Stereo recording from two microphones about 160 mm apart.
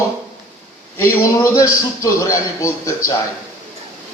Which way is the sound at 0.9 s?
15° left (ahead or behind).